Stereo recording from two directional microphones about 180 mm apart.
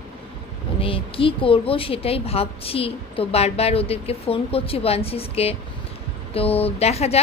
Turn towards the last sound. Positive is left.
turn(degrees=35)  # may be behind; listen again after turning